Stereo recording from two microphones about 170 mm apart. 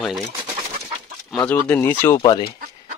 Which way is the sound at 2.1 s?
30° left (ahead or behind).